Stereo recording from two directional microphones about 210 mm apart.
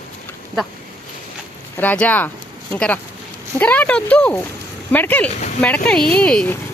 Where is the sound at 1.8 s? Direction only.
10° left (ahead or behind).